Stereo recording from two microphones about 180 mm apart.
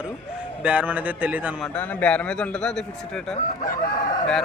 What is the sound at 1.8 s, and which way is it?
A man's voice, 10° left (ahead or behind).